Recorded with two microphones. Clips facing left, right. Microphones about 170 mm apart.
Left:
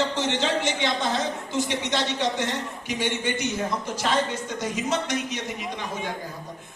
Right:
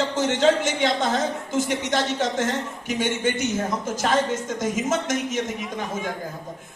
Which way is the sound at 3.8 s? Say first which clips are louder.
Right 4 dB; 45° right (ahead or behind).